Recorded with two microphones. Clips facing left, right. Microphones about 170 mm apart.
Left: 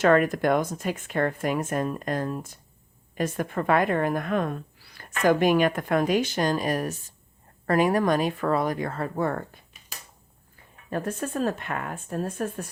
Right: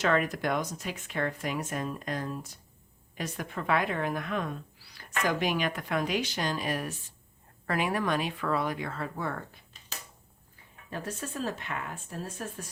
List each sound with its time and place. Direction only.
0.0 s speech: 50° left (ahead or behind)
10.8 s speech: 50° left (ahead or behind)